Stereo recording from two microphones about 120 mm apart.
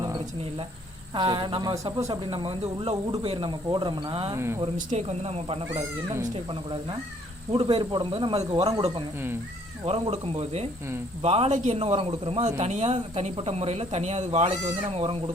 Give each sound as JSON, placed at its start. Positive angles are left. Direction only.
{"t": 1.1, "sound": "speech", "side_deg": -40}
{"t": 1.7, "sound": "speech", "side_deg": -30}
{"t": 2.2, "sound": "speech", "side_deg": -45}
{"t": 4.4, "sound": "speech", "side_deg": -20}
{"t": 4.9, "sound": "speech", "side_deg": -65}
{"t": 9.8, "sound": "speech", "side_deg": -55}